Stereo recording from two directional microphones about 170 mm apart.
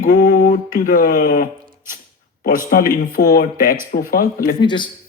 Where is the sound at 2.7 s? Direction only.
55° left (ahead or behind).